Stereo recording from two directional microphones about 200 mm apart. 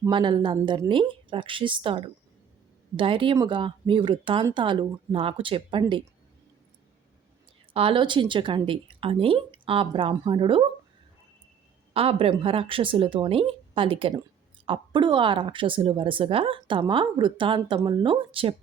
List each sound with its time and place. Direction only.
0.0 s speech: 25° right (ahead or behind)
7.7 s speech: 25° right (ahead or behind)
11.9 s speech: 30° right (ahead or behind)